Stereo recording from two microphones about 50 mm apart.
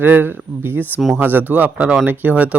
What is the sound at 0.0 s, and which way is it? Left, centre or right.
Speech, right.